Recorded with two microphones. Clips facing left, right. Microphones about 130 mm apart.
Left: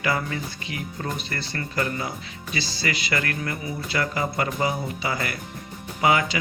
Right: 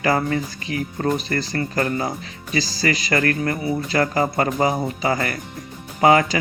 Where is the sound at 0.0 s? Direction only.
40° right (ahead or behind).